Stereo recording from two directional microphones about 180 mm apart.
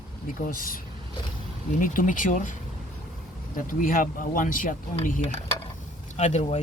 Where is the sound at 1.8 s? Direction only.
50° left (ahead or behind).